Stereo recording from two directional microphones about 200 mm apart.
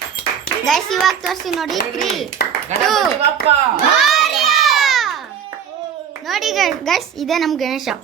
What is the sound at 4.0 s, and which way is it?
Children playing, centre (ahead or behind).